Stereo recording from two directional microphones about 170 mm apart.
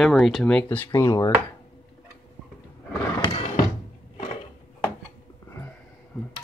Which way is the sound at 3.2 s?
35° left (ahead or behind).